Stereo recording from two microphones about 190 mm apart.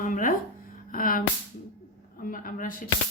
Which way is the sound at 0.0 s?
45° left (ahead or behind).